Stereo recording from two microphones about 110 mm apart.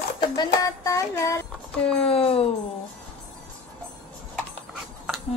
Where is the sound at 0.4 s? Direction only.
30° left (ahead or behind).